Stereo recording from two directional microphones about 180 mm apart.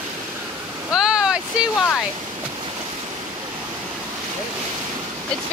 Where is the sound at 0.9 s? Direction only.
5° right (ahead or behind).